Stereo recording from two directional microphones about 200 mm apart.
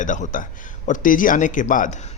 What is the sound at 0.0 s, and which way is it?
Speech, 40° left (ahead or behind).